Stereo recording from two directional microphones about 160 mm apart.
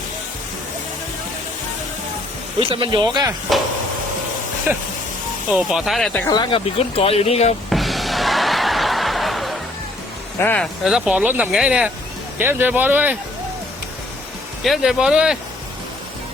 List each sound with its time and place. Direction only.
2.6 s speech: 30° right (ahead or behind)
4.7 s speech: 10° right (ahead or behind)
6.2 s speech: 25° left (ahead or behind)
7.7 s snicker: centre (ahead or behind)
10.3 s speech: 10° left (ahead or behind)
10.8 s speech: 5° right (ahead or behind)
14.6 s speech: centre (ahead or behind)